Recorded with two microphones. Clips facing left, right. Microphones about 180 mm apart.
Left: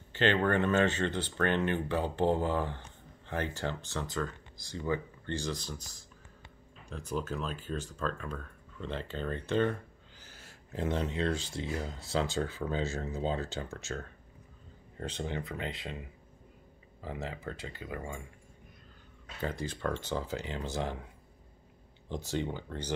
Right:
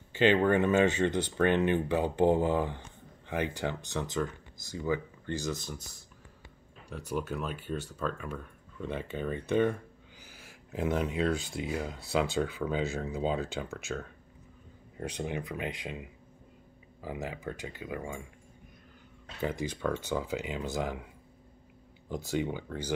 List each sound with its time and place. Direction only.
0.1 s speech: 15° right (ahead or behind)
6.9 s speech: 5° right (ahead or behind)
15.0 s speech: 15° right (ahead or behind)
19.6 s speech: 10° right (ahead or behind)
22.1 s speech: 10° right (ahead or behind)